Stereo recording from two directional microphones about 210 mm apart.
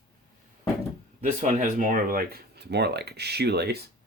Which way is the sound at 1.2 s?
35° right (ahead or behind).